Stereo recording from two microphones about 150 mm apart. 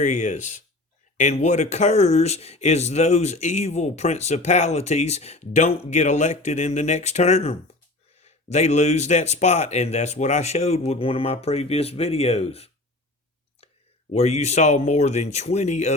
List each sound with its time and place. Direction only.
0.0 s speech: 55° left (ahead or behind)
14.1 s speech: 45° left (ahead or behind)